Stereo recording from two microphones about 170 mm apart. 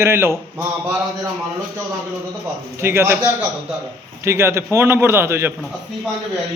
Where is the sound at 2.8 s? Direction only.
15° right (ahead or behind).